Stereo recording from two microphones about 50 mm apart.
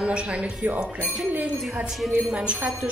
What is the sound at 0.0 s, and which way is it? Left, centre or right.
Speech, right.